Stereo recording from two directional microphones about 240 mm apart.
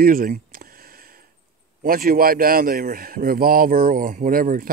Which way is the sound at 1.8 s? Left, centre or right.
Right.